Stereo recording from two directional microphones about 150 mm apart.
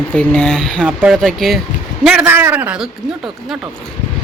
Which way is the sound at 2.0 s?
10° right (ahead or behind).